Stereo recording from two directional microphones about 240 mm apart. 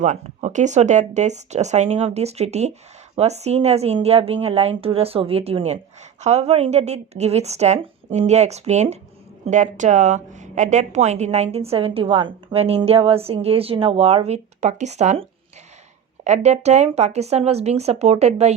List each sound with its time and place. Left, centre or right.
0.0 s a woman's voice: right